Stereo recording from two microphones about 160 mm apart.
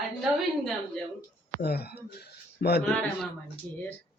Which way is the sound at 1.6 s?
90° left.